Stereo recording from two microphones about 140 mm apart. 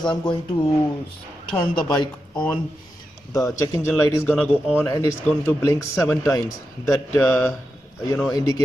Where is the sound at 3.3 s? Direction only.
20° left (ahead or behind).